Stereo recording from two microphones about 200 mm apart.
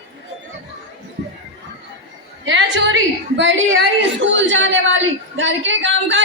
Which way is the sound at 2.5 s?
65° right (ahead or behind).